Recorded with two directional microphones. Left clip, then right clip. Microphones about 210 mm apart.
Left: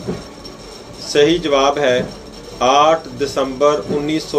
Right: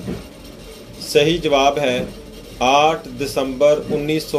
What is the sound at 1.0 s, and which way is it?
Speech, 30° right (ahead or behind).